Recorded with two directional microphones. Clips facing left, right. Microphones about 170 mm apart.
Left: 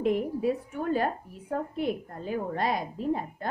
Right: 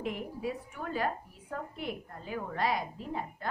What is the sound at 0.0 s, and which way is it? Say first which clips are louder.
A woman's voice: left 9 dB; 45° left (ahead or behind).